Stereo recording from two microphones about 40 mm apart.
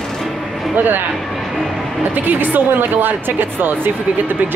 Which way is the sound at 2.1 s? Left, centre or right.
Right.